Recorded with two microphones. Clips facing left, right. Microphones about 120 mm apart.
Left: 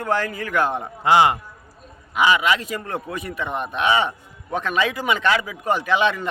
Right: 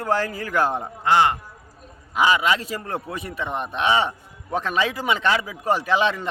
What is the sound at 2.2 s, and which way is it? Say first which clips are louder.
A man's voice: left 1 dB; 30° right (ahead or behind).